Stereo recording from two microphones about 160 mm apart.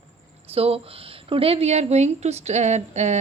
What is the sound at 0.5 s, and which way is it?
A woman's voice, 35° right (ahead or behind).